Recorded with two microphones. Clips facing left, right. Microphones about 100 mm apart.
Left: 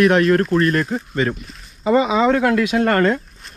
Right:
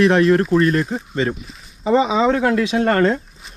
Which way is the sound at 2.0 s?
30° right (ahead or behind).